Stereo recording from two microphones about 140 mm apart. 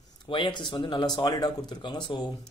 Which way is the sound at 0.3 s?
35° left (ahead or behind).